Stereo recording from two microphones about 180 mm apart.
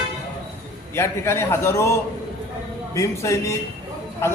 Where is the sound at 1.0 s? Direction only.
15° left (ahead or behind).